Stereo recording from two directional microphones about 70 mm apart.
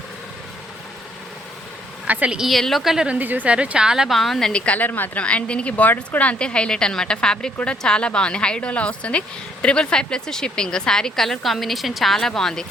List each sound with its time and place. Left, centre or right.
2.0 s a woman's voice: right
2.4 s a woman's voice: centre
3.1 s a woman's voice: right; by 12.6 s centre